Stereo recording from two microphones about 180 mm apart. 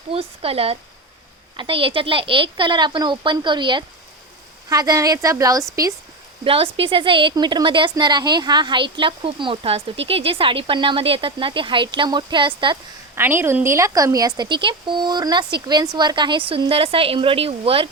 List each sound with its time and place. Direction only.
0.1 s a woman's voice: 30° right (ahead or behind)
6.4 s a woman's voice: 30° right (ahead or behind)
13.1 s a woman's voice: 10° right (ahead or behind); by 17.8 s 30° right (ahead or behind)